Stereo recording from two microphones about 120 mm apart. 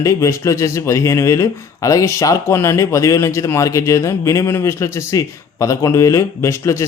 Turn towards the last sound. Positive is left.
turn(degrees=25)  # may be behind; listen again after turning